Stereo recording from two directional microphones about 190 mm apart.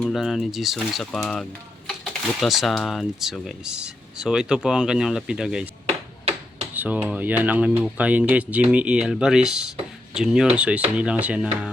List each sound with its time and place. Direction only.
0.0 s speech: centre (ahead or behind)
5.8 s ping: 30° right (ahead or behind)
6.7 s speech: 10° right (ahead or behind)